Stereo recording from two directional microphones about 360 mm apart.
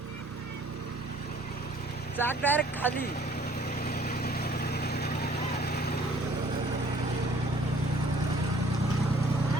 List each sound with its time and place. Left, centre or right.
2.1 s speech: centre
3.8 s vehicle: left